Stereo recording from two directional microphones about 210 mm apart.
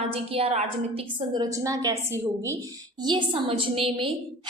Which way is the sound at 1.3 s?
15° right (ahead or behind).